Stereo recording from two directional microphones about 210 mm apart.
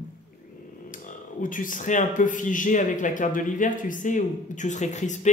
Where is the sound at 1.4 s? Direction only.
40° left (ahead or behind).